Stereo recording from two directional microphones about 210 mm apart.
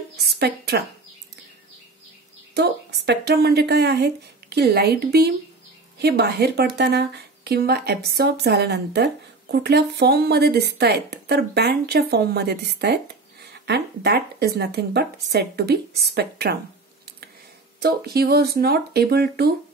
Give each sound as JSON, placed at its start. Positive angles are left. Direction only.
{"t": 0.2, "sound": "a sound", "side_deg": -50}
{"t": 2.5, "sound": "speech", "side_deg": -55}
{"t": 17.7, "sound": "speech", "side_deg": -50}